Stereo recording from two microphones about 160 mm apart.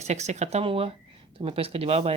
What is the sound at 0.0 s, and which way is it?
Speech, 45° right (ahead or behind).